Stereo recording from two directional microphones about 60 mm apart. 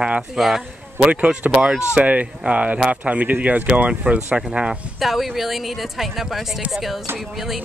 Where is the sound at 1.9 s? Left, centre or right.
Right.